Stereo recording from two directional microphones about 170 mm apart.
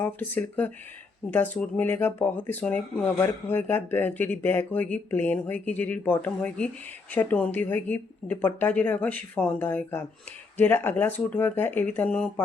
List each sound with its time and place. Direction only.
0.0 s speech: 10° left (ahead or behind)